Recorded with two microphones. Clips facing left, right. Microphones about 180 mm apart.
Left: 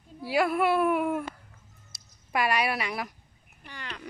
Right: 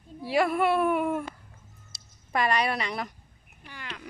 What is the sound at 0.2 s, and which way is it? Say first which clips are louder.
Speech: right 1 dB; centre (ahead or behind).